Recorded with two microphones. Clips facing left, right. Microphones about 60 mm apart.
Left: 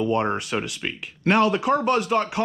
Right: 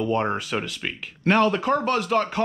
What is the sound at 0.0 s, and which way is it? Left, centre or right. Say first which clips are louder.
Speech: left 1 dB; centre.